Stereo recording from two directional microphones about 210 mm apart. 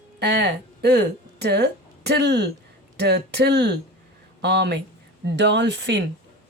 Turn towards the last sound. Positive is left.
turn(degrees=-55)  # may be behind; listen again after turning